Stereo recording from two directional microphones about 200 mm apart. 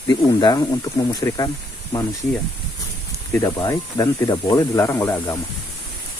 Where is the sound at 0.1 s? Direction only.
20° left (ahead or behind).